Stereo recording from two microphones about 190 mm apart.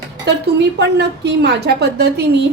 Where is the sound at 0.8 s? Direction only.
65° right (ahead or behind).